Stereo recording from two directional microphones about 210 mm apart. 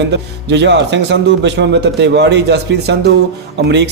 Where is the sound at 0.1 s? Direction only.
55° right (ahead or behind).